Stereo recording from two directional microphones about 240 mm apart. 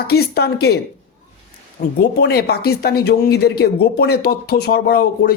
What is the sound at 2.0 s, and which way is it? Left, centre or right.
Speech, left.